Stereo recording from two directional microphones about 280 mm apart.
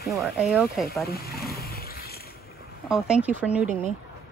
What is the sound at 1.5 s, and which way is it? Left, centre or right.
Vehicle, left.